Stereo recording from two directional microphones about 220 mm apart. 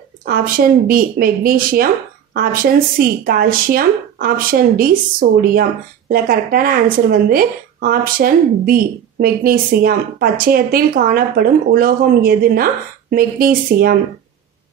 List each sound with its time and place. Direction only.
0.2 s speech: 40° right (ahead or behind)